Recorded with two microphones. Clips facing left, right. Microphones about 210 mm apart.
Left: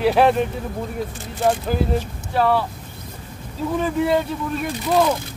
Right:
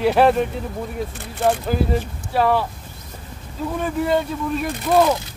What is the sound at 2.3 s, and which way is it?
Speech, 10° right (ahead or behind).